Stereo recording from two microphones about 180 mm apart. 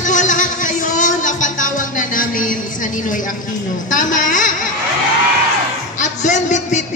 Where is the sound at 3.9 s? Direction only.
45° left (ahead or behind).